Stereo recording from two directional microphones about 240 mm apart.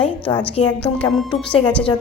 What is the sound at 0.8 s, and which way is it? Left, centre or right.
Speech, centre.